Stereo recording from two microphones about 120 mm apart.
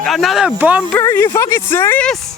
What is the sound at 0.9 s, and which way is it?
Speech, 25° left (ahead or behind).